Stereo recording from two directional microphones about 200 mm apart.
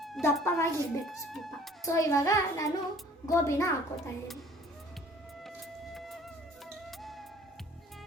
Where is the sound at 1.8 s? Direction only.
15° left (ahead or behind).